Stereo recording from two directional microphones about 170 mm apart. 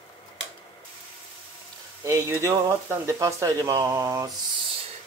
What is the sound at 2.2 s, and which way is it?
Speech, 15° right (ahead or behind).